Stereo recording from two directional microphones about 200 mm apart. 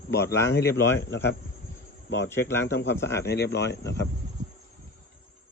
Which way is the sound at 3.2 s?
55° left (ahead or behind).